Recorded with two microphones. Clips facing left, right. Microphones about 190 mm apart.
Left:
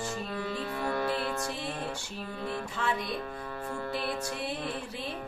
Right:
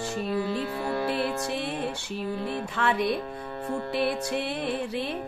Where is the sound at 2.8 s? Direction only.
70° right (ahead or behind).